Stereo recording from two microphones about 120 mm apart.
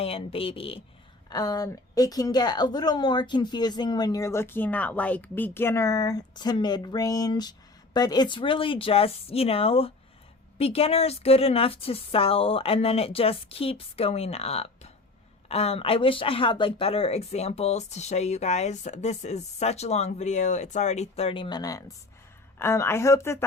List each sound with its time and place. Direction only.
0.0 s speech: 55° left (ahead or behind)
1.3 s a woman's voice: 30° left (ahead or behind)
21.6 s a woman's voice: 30° left (ahead or behind)